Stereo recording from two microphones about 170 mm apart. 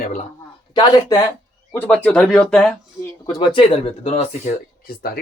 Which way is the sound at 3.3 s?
30° left (ahead or behind).